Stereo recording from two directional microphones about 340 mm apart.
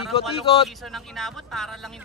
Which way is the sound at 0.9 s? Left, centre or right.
Centre.